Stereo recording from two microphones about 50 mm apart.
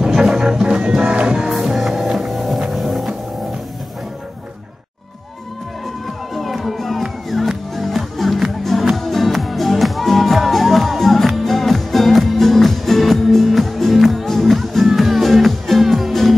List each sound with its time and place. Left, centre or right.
0.0 s music: centre
1.5 s music: centre
6.3 s music: centre